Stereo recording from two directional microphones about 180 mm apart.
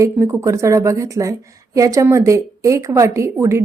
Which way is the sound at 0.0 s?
15° right (ahead or behind).